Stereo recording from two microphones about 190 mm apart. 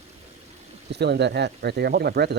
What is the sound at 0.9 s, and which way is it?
Speech, 60° right (ahead or behind).